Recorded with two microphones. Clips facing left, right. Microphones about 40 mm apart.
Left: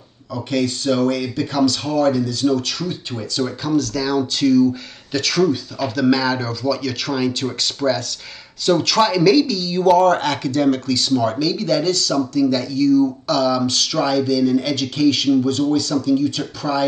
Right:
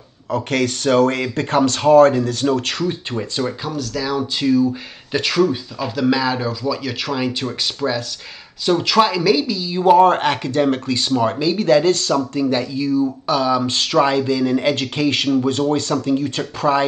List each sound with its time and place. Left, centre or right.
0.3 s speech: right
3.6 s a man's voice: centre
13.7 s speech: right